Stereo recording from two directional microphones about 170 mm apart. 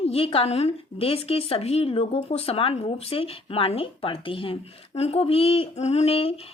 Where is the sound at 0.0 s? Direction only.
35° left (ahead or behind).